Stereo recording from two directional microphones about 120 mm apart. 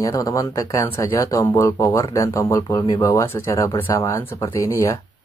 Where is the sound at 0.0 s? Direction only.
25° left (ahead or behind).